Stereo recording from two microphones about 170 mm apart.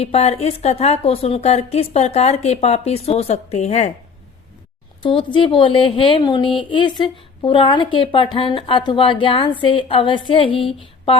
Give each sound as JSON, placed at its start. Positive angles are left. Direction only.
{"t": 0.0, "sound": "a woman's voice", "side_deg": 40}
{"t": 5.0, "sound": "a woman's voice", "side_deg": 30}